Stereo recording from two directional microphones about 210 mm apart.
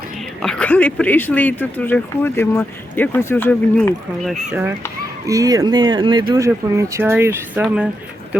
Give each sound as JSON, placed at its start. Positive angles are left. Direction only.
{"t": 0.4, "sound": "speech", "side_deg": 5}
{"t": 5.2, "sound": "speech", "side_deg": -15}